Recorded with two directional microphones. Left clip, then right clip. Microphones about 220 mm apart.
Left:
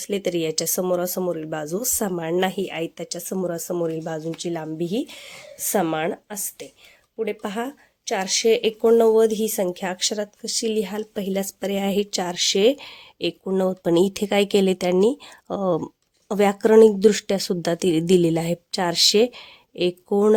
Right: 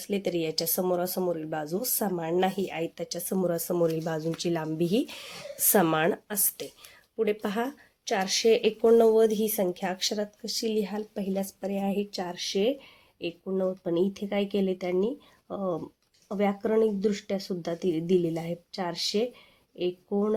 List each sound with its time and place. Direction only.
0.0 s speech: 30° left (ahead or behind); by 20.3 s 50° left (ahead or behind)